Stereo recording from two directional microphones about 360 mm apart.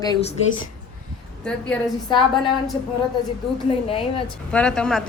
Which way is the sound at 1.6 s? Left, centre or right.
Centre.